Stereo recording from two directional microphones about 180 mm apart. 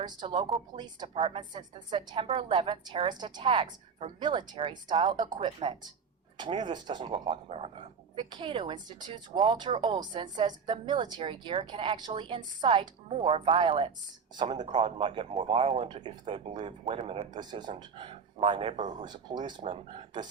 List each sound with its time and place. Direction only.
0.0 s speech: 25° right (ahead or behind)